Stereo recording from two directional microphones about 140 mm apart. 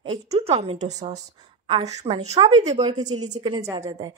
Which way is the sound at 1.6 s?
45° right (ahead or behind).